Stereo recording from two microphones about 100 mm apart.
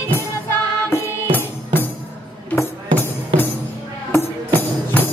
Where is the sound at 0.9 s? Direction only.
20° left (ahead or behind).